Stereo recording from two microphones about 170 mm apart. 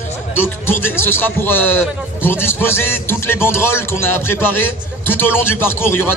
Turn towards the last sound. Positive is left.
turn(degrees=15)  # may be behind; listen again after turning